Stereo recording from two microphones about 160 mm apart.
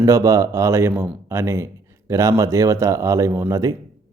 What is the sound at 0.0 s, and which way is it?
A man's voice, 20° right (ahead or behind).